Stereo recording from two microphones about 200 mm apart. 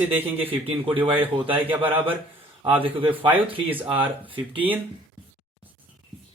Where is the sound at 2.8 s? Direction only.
25° right (ahead or behind).